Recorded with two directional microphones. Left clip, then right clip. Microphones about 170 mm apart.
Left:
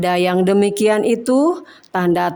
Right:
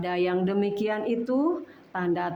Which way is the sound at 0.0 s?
50° left (ahead or behind).